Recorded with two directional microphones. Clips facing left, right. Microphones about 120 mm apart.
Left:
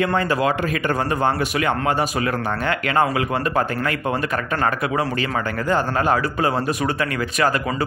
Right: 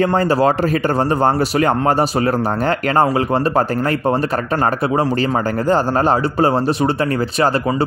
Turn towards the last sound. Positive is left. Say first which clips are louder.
# right 4 dB
turn(degrees=-30)  # may be behind; listen again after turning